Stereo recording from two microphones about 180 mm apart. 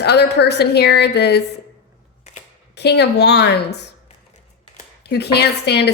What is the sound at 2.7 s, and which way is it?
A woman's voice, 70° left (ahead or behind).